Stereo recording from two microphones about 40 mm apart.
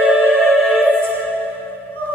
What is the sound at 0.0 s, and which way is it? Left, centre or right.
Music, right.